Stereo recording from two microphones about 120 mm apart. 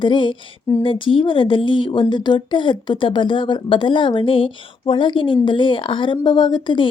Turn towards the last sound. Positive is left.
turn(degrees=40)  # may be behind; listen again after turning